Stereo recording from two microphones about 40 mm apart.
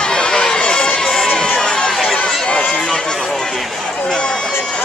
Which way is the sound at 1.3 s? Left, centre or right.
Left.